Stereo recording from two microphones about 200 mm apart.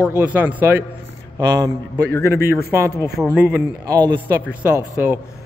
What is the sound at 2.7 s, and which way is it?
Speech, 15° right (ahead or behind).